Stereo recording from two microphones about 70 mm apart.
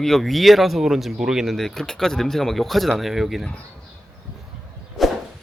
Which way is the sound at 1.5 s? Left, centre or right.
Centre.